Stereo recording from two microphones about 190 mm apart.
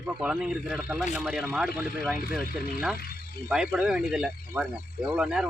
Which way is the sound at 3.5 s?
5° right (ahead or behind).